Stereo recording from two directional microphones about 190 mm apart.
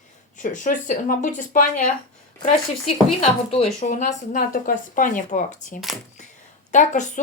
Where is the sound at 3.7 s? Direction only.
40° left (ahead or behind).